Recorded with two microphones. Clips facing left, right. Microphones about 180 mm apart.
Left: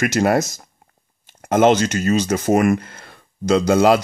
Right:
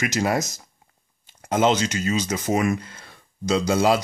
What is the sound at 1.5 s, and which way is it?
Speech, 50° left (ahead or behind).